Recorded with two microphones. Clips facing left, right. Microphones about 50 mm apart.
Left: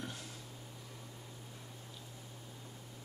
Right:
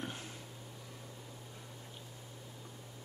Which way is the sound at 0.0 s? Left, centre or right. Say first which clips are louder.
Right 2 dB; right.